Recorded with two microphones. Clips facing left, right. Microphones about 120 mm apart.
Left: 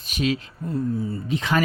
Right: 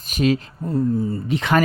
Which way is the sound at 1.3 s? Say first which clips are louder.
Right 4 dB; 65° right (ahead or behind).